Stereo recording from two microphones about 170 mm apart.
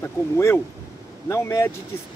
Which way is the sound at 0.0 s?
15° left (ahead or behind).